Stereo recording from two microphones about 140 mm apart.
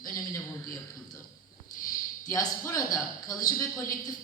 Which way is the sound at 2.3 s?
25° left (ahead or behind).